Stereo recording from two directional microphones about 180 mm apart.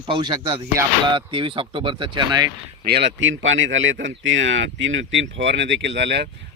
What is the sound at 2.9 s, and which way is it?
Speech, 75° right (ahead or behind).